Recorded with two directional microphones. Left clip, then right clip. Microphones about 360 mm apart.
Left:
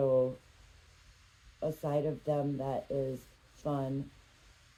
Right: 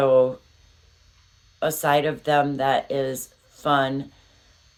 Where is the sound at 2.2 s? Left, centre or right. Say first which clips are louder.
Right 13 dB; centre.